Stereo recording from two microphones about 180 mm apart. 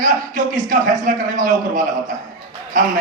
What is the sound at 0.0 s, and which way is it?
A man's voice, 50° right (ahead or behind).